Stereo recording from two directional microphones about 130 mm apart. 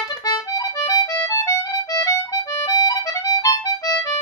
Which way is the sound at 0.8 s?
25° left (ahead or behind).